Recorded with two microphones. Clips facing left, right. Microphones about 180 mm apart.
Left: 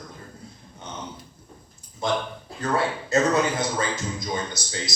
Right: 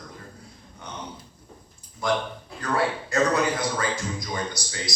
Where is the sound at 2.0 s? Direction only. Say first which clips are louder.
Even; 25° left (ahead or behind).